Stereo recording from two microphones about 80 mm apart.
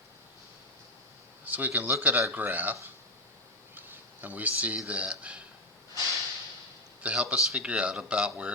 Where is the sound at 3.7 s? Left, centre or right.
Right.